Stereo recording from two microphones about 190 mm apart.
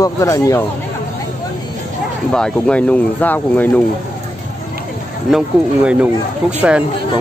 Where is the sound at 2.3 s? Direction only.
5° left (ahead or behind).